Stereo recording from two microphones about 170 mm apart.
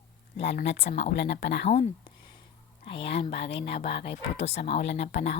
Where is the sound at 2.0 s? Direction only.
25° left (ahead or behind).